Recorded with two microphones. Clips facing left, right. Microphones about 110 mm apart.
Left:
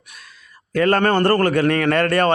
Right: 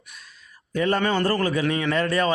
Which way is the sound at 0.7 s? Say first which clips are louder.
Left 6 dB; 85° left.